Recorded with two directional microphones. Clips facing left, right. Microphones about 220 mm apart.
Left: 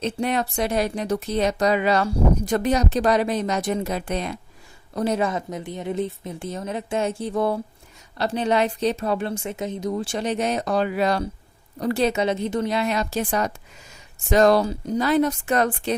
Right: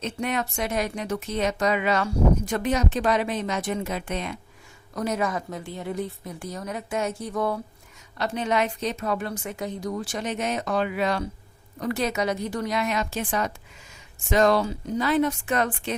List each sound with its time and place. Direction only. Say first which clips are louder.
0.0 s a woman's voice: left 4 dB; 35° left (ahead or behind)